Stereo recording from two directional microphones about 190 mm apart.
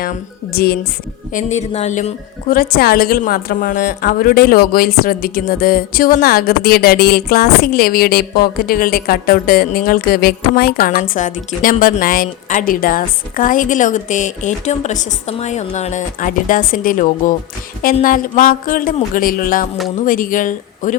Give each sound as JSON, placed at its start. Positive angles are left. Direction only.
{"t": 0.0, "sound": "a woman's voice", "side_deg": 50}
{"t": 1.3, "sound": "a woman's voice", "side_deg": 40}